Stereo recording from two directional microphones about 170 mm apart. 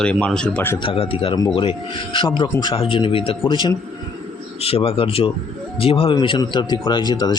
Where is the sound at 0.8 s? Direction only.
30° left (ahead or behind).